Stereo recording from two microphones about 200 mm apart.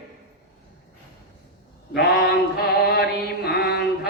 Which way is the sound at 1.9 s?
55° left (ahead or behind).